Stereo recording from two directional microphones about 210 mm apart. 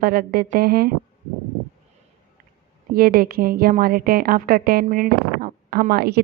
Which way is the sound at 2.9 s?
45° right (ahead or behind).